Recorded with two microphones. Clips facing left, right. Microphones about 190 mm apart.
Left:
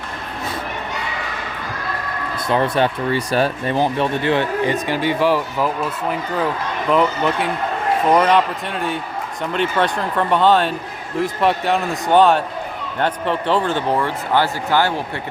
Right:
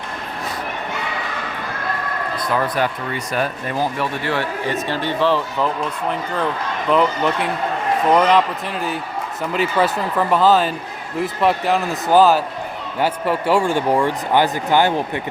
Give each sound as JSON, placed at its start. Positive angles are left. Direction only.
{"t": 2.4, "sound": "speech", "side_deg": 25}